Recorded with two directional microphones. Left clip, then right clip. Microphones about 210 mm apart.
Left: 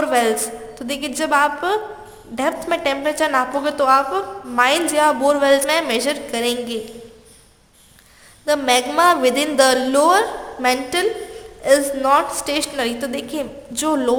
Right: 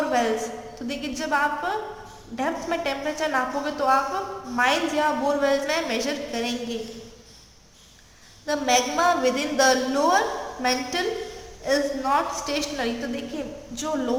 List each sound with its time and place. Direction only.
0.0 s a sound: 55° left (ahead or behind)
0.9 s a woman's voice: 55° left (ahead or behind)
8.4 s a woman's voice: 50° left (ahead or behind)